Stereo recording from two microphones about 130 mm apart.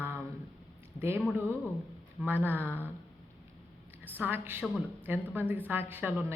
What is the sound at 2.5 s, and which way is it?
Speech, 15° right (ahead or behind).